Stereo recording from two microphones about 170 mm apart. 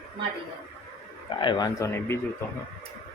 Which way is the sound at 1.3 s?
30° left (ahead or behind).